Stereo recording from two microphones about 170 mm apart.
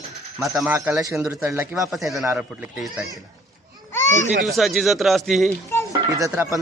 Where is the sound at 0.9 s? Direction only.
20° right (ahead or behind).